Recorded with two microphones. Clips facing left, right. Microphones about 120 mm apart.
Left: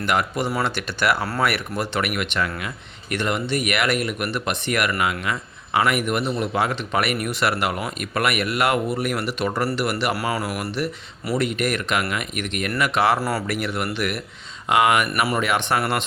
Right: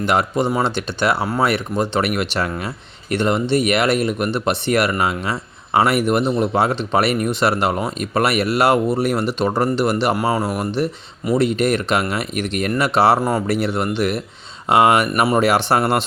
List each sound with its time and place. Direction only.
0.0 s speech: 30° right (ahead or behind)
1.2 s speech: 15° right (ahead or behind)
1.5 s speech: 25° right (ahead or behind)
13.2 s speech: 20° right (ahead or behind)